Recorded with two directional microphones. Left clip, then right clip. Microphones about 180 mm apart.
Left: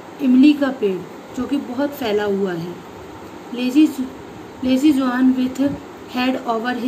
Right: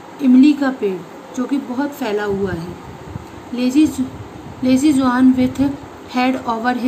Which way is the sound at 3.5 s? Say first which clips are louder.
Right 1 dB; 15° right (ahead or behind).